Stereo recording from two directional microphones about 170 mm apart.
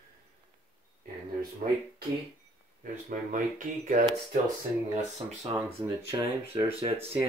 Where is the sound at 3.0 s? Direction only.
50° right (ahead or behind).